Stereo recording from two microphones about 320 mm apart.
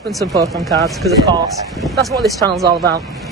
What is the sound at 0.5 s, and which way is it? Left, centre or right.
Speech, centre.